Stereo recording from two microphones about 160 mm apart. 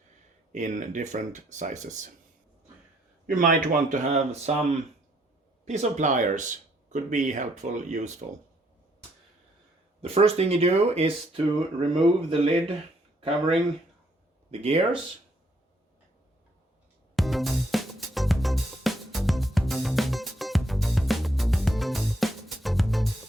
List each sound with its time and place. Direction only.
0.5 s speech: 50° right (ahead or behind)
3.2 s speech: 60° right (ahead or behind)
10.0 s speech: 35° right (ahead or behind)
14.5 s speech: 40° right (ahead or behind)
17.2 s music: centre (ahead or behind)